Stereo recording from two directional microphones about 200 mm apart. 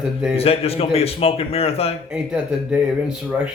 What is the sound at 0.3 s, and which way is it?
A man's voice, 30° left (ahead or behind).